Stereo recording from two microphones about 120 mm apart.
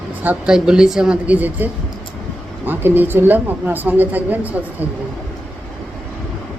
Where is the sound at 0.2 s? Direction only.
10° right (ahead or behind).